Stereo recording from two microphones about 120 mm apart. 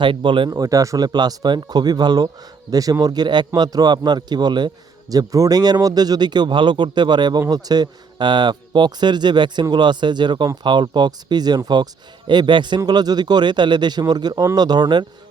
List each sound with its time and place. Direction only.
0.0 s speech: 40° right (ahead or behind)
0.5 s speech: 30° right (ahead or behind)